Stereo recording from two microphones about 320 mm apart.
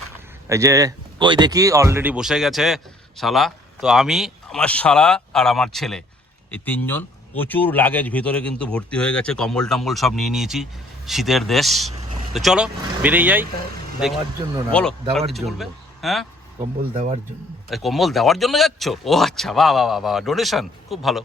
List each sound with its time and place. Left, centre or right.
0.4 s speech: centre
14.7 s speech: centre
16.6 s speech: centre
17.7 s speech: centre